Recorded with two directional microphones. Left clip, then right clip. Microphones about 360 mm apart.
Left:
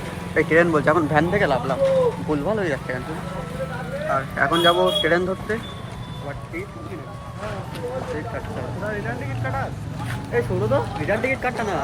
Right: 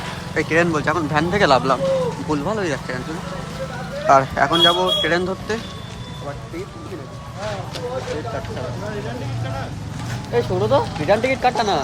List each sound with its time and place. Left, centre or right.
0.3 s speech: centre
4.2 s speech: centre
10.3 s speech: centre